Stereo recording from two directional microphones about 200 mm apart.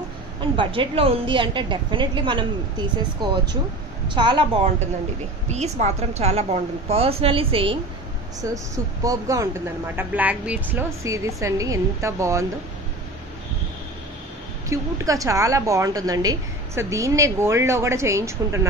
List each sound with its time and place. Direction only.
0.4 s a woman's voice: 25° right (ahead or behind)
8.4 s speech: 15° right (ahead or behind)
14.7 s speech: 15° right (ahead or behind)